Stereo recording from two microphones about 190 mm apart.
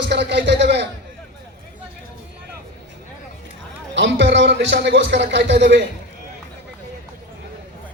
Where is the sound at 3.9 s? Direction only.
70° right (ahead or behind).